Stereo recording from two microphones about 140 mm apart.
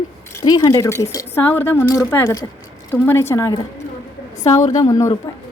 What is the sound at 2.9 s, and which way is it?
Speech, 15° left (ahead or behind).